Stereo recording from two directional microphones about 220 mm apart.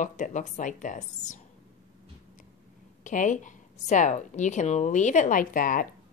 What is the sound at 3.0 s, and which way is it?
A woman's voice, 35° left (ahead or behind).